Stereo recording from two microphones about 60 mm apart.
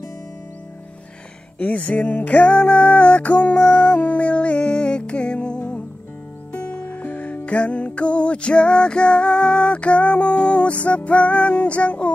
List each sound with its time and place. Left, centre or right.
1.6 s music: left